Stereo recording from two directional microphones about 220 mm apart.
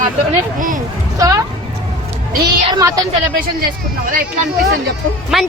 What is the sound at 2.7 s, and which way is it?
Speech, 15° right (ahead or behind).